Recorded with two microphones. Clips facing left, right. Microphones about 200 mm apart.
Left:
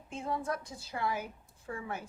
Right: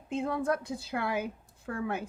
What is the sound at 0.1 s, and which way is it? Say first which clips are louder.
A woman's voice: right 6 dB; 60° right (ahead or behind).